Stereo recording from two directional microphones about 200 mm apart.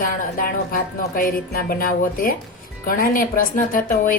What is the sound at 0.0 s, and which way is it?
Speech, 45° left (ahead or behind).